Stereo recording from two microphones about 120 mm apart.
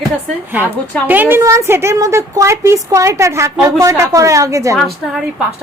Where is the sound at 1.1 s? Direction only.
15° right (ahead or behind).